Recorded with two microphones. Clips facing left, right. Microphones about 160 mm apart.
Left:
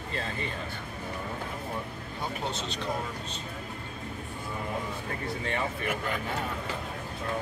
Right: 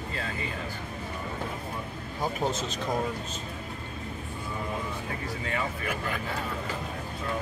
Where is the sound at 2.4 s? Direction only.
45° right (ahead or behind).